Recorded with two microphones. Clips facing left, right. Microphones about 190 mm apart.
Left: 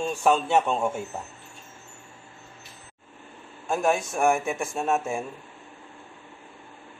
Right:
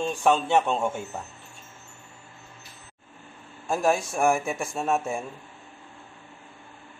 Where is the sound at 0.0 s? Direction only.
5° left (ahead or behind).